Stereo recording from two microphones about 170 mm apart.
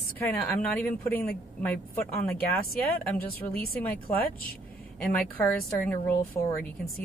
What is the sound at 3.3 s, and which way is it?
Speech, 60° left (ahead or behind).